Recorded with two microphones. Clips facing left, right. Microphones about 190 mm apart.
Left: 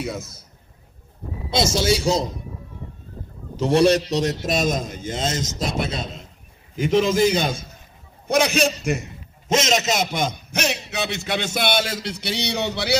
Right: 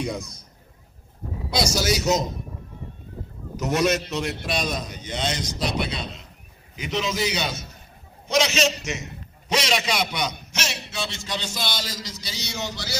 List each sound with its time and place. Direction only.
0.0 s a man's voice: 5° left (ahead or behind)
1.5 s speech: 25° left (ahead or behind)
3.5 s a man's voice: 30° left (ahead or behind); by 12.9 s 65° left (ahead or behind)